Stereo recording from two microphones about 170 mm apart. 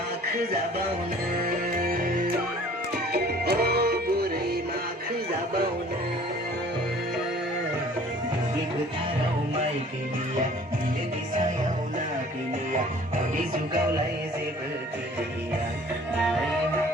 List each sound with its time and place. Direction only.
1.5 s music: 60° right (ahead or behind)
3.1 s music: 70° right (ahead or behind)